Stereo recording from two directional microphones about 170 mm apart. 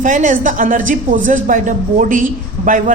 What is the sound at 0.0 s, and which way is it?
Speech, 50° right (ahead or behind).